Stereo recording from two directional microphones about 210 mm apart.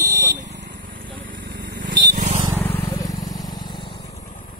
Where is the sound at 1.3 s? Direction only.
55° right (ahead or behind).